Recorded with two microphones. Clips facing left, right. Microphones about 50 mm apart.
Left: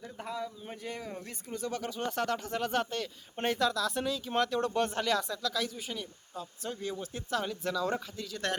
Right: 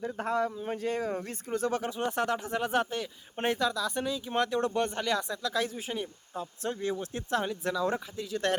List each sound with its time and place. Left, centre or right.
0.0 s speech: right
2.0 s speech: centre
5.3 s speech: right
7.4 s speech: centre